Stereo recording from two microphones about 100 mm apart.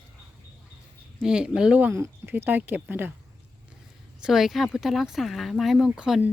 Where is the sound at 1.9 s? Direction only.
25° right (ahead or behind).